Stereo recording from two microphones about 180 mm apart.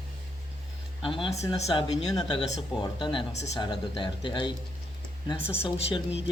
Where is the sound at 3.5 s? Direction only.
25° left (ahead or behind).